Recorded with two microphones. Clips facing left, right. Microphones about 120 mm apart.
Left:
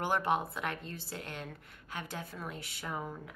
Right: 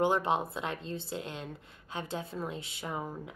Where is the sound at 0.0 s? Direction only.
20° right (ahead or behind).